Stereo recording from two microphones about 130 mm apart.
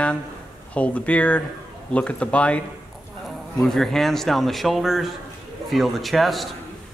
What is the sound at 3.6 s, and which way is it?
A man's voice, 5° left (ahead or behind).